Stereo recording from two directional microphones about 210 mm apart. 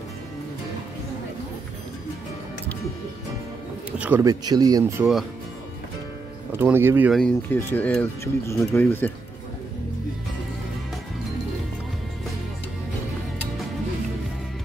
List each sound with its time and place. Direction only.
4.0 s speech: 10° right (ahead or behind)
6.5 s speech: 10° right (ahead or behind)
7.2 s speech: 5° left (ahead or behind)